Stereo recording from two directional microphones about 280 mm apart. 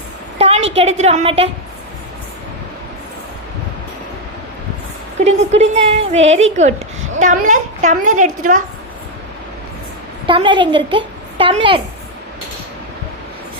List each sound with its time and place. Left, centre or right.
0.3 s a sound: right
0.8 s a woman's voice: right
5.2 s a woman's voice: right
10.2 s a woman's voice: centre